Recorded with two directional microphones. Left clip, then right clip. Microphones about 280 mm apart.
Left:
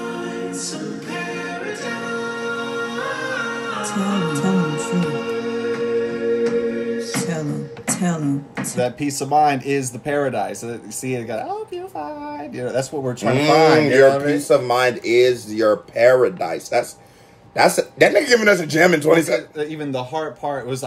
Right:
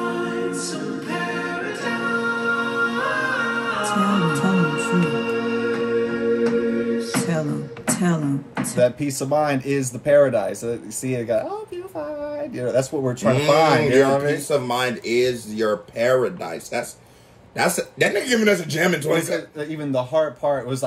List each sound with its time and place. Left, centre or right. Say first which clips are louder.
0.0 s music: right 3 dB; right
8.7 s speech: right 3 dB; centre
12.5 s speech: right 1 dB; centre
14.5 s speech: left 9 dB; centre
19.6 s speech: even; centre